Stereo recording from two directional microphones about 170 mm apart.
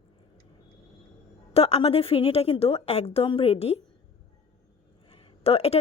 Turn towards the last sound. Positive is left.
turn(degrees=35)  # may be behind; listen again after turning